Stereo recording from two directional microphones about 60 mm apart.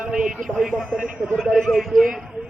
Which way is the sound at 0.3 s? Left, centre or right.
Centre.